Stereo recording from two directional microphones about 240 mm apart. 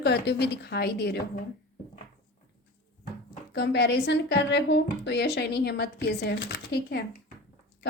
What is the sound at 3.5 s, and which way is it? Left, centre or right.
Speech, left.